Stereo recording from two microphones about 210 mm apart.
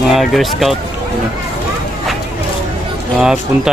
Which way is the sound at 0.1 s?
Centre (ahead or behind).